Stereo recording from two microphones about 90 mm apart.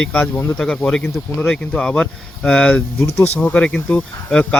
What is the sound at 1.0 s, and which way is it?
Speech, 25° left (ahead or behind).